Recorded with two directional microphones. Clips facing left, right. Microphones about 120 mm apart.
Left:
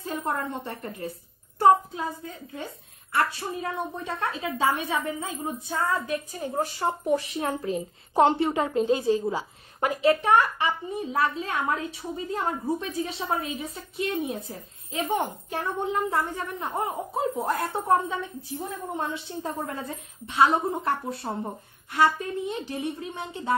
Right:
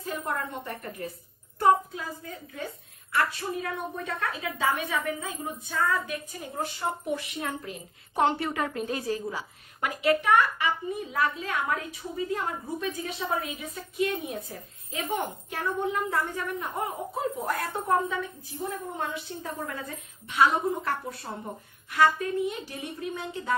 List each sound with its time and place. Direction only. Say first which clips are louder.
0.0 s a woman's voice: left 2 dB; 25° left (ahead or behind)